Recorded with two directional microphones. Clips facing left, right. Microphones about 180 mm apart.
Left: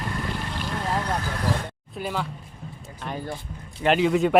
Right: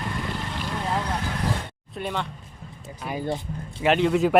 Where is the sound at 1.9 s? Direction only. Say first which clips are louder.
Even; 5° left (ahead or behind).